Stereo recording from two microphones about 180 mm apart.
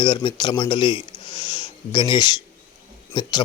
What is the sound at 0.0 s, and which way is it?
Speech, 25° left (ahead or behind).